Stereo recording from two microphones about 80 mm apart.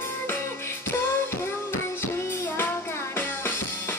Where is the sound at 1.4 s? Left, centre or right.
Left.